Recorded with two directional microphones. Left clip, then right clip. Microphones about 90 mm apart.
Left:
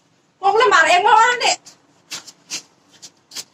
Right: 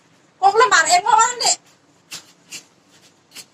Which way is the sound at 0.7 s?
30° left (ahead or behind).